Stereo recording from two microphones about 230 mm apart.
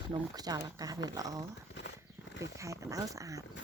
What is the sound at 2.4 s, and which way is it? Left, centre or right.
Speech, centre.